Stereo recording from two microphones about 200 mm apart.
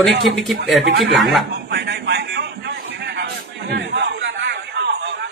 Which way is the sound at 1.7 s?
55° right (ahead or behind).